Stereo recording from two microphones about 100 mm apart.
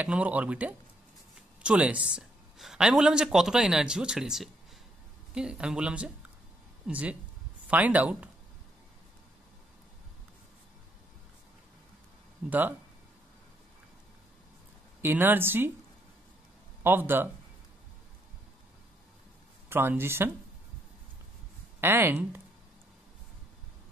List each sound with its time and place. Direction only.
0.0 s speech: 15° right (ahead or behind)
12.4 s speech: 15° right (ahead or behind)
15.0 s speech: 20° right (ahead or behind)
16.8 s speech: 20° right (ahead or behind)
19.7 s speech: 20° right (ahead or behind)
21.8 s speech: 25° right (ahead or behind)